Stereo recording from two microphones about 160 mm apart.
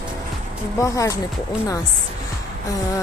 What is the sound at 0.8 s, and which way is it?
Speech, 20° left (ahead or behind).